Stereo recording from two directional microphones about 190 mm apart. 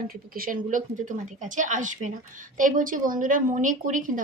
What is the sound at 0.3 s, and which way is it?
A woman's voice, 50° right (ahead or behind).